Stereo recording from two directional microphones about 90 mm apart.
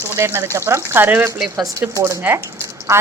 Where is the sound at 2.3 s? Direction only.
15° right (ahead or behind).